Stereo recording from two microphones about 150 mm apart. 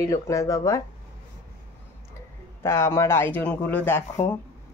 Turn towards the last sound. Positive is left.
turn(degrees=15)  # may be behind; listen again after turning